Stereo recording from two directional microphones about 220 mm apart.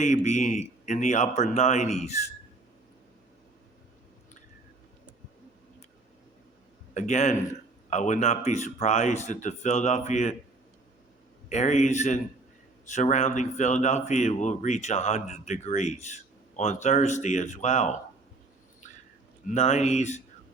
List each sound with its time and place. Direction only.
0.0 s speech: 30° left (ahead or behind)
6.9 s speech: 35° left (ahead or behind)
11.4 s speech: 30° left (ahead or behind)
19.5 s speech: 30° left (ahead or behind)